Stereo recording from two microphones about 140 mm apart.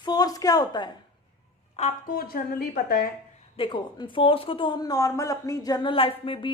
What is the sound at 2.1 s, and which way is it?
A woman's voice, 90° left.